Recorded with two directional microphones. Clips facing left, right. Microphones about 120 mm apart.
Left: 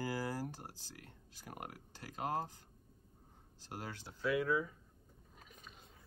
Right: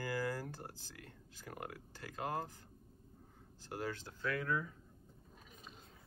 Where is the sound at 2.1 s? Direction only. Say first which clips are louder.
Left 2 dB; 20° left (ahead or behind).